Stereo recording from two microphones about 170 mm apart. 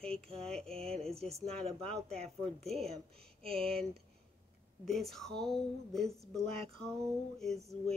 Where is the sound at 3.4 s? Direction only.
35° right (ahead or behind).